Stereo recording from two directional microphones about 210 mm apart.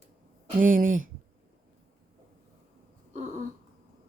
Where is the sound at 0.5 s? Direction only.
40° right (ahead or behind).